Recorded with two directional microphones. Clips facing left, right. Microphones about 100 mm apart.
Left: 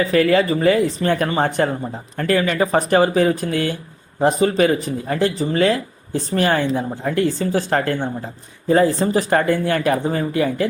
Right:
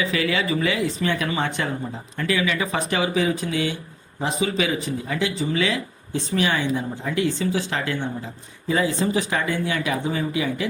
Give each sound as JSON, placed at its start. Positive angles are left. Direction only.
{"t": 0.0, "sound": "speech", "side_deg": 45}